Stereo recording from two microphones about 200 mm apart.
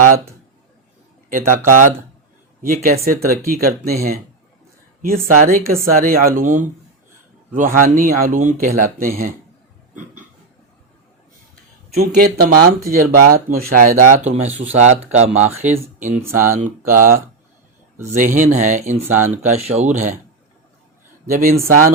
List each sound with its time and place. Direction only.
1.3 s speech: 40° right (ahead or behind)
9.9 s a sound: 40° right (ahead or behind)
11.9 s speech: 50° right (ahead or behind)
21.2 s speech: 45° right (ahead or behind)